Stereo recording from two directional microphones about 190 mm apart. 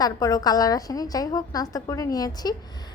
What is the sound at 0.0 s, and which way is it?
A woman's voice, 20° left (ahead or behind).